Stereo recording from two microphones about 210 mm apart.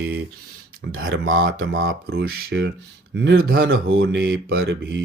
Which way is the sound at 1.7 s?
50° right (ahead or behind).